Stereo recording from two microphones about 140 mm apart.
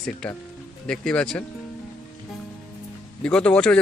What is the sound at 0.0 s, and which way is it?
Speech, 5° left (ahead or behind).